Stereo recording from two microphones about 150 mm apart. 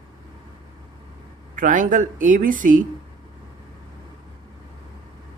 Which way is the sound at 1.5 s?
60° right (ahead or behind).